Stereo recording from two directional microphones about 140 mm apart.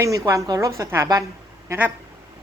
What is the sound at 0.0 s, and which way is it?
A woman's voice, 25° right (ahead or behind).